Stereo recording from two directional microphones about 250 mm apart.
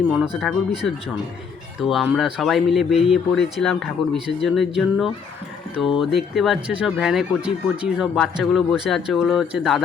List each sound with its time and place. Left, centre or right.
0.2 s speech: centre
1.8 s speech: centre